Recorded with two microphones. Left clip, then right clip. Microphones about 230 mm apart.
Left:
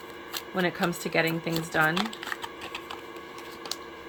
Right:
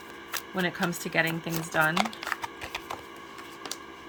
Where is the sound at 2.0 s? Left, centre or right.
Right.